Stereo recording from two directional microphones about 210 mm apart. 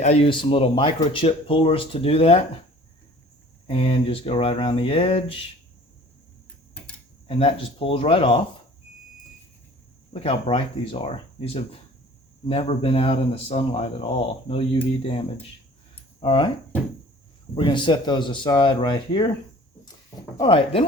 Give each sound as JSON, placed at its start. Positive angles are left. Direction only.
{"t": 0.0, "sound": "speech", "side_deg": 30}
{"t": 3.7, "sound": "speech", "side_deg": 25}
{"t": 7.3, "sound": "speech", "side_deg": 25}
{"t": 10.1, "sound": "speech", "side_deg": 25}
{"t": 16.2, "sound": "speech", "side_deg": 25}
{"t": 17.5, "sound": "speech", "side_deg": 25}
{"t": 20.3, "sound": "speech", "side_deg": 25}